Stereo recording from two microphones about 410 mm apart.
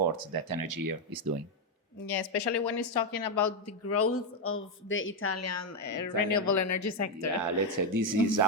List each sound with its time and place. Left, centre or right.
0.0 s speech: right
2.0 s speech: left
7.4 s speech: right